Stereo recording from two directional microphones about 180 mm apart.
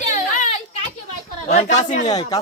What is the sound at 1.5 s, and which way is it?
Speech, 40° left (ahead or behind).